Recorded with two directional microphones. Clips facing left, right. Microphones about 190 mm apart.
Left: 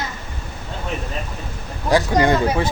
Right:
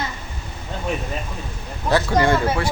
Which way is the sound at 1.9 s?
15° left (ahead or behind).